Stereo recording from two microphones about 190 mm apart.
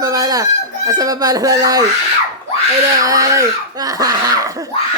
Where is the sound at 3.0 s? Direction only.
20° right (ahead or behind).